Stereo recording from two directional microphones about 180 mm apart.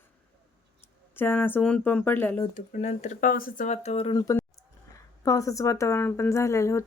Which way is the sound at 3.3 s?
50° left (ahead or behind).